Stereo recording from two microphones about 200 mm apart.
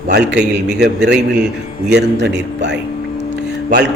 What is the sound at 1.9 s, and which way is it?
Speech, 60° right (ahead or behind).